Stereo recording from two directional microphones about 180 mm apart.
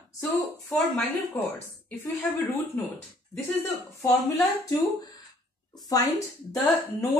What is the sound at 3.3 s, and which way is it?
Speech, 10° left (ahead or behind).